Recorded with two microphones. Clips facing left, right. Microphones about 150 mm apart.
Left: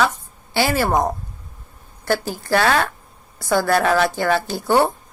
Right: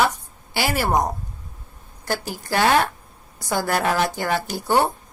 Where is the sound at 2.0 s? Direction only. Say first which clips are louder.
Left 5 dB; 15° right (ahead or behind).